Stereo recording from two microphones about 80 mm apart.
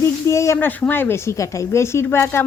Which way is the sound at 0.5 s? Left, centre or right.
Left.